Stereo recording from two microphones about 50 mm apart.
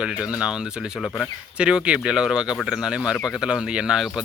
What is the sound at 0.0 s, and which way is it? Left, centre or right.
Speech, centre.